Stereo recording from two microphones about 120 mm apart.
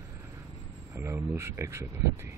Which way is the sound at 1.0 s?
20° right (ahead or behind).